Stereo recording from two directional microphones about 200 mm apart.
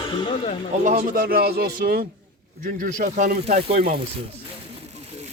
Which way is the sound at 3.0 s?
40° right (ahead or behind).